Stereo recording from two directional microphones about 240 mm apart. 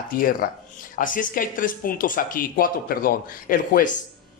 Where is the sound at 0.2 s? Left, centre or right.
Left.